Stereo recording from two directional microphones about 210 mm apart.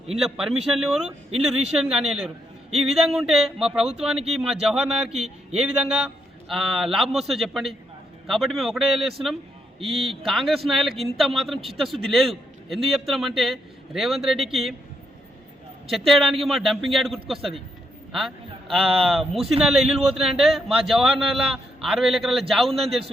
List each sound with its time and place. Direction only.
0.2 s a man's voice: centre (ahead or behind)
9.8 s a man's voice: 25° right (ahead or behind)
10.2 s a man's voice: centre (ahead or behind)
15.9 s a man's voice: centre (ahead or behind)
18.7 s a man's voice: centre (ahead or behind)